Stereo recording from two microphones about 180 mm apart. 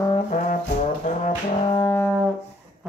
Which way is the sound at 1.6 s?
20° left (ahead or behind).